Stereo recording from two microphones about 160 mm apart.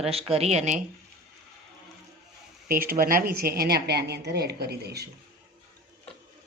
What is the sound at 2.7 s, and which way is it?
Speech, 65° right (ahead or behind).